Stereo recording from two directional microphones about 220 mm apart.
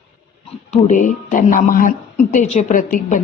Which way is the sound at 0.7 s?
35° left (ahead or behind).